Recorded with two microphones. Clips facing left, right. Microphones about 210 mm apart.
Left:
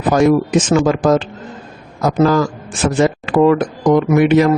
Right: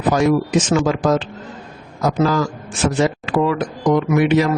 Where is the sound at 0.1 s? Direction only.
50° left (ahead or behind).